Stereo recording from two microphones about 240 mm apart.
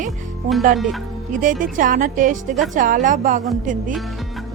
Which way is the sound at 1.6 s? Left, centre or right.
Right.